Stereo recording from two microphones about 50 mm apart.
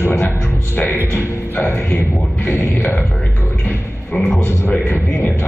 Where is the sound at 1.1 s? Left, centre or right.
Left.